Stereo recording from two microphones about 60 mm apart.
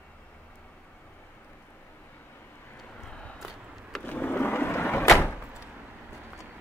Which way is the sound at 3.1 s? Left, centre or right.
Left.